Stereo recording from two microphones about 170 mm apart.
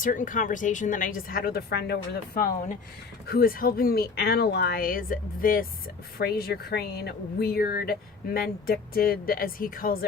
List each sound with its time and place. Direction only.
0.0 s a woman's voice: 50° left (ahead or behind)
6.1 s speech: 65° left (ahead or behind)